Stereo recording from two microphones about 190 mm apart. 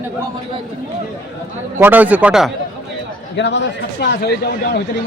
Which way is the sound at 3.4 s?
65° left (ahead or behind).